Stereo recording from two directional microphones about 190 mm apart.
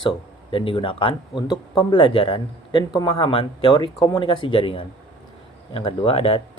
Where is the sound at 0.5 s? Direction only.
30° left (ahead or behind).